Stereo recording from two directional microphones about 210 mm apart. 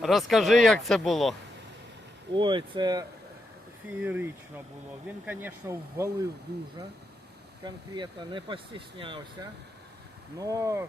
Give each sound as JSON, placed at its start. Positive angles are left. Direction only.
{"t": 0.0, "sound": "speech", "side_deg": 0}
{"t": 2.3, "sound": "speech", "side_deg": -20}
{"t": 4.0, "sound": "speech", "side_deg": -10}
{"t": 7.6, "sound": "speech", "side_deg": -20}
{"t": 10.3, "sound": "speech", "side_deg": -15}